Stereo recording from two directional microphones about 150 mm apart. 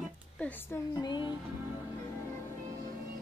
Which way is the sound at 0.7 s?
30° left (ahead or behind).